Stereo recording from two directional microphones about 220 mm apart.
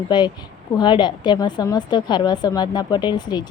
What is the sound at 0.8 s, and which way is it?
A woman's voice, 20° left (ahead or behind).